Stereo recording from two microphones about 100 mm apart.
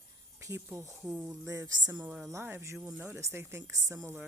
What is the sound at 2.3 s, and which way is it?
Speech, 25° right (ahead or behind).